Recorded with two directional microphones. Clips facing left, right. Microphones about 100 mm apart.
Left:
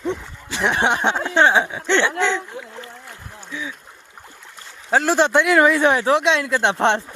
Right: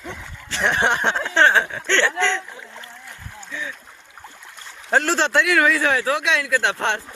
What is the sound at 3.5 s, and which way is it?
Speech, 5° left (ahead or behind).